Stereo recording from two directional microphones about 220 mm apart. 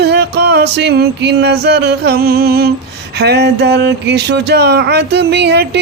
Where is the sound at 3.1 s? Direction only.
50° right (ahead or behind).